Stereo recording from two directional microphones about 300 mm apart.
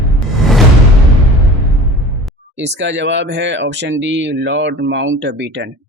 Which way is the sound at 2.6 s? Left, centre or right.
Right.